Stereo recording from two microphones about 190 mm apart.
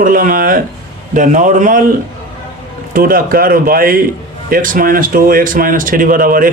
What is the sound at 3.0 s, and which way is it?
Speech, 50° right (ahead or behind).